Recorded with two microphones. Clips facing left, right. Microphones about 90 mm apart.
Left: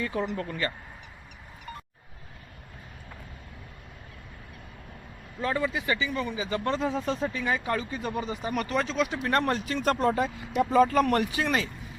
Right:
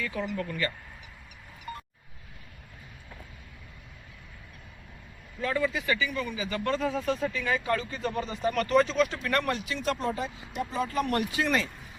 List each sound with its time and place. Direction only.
0.0 s speech: 30° left (ahead or behind)
5.4 s speech: 20° left (ahead or behind); by 9.0 s centre (ahead or behind)
9.2 s speech: 30° left (ahead or behind); by 10.8 s 60° left (ahead or behind)
11.1 s speech: 30° left (ahead or behind)